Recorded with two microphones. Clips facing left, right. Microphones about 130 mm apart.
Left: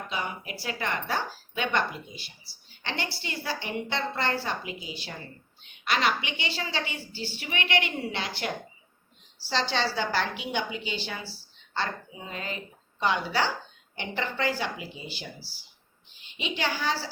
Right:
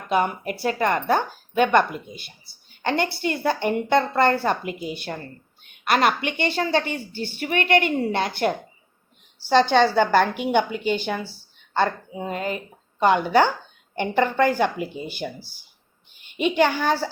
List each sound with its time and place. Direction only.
0.1 s a woman's voice: 55° right (ahead or behind)